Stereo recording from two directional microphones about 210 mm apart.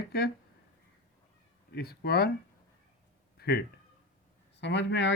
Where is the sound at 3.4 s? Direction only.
50° left (ahead or behind).